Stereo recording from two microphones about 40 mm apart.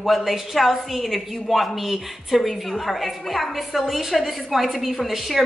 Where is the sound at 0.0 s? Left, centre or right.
Centre.